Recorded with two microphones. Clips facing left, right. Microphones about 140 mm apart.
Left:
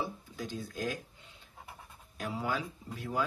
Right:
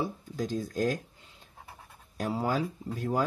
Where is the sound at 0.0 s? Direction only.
40° right (ahead or behind).